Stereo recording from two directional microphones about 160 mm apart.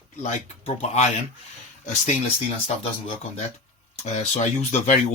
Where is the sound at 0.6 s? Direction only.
45° left (ahead or behind).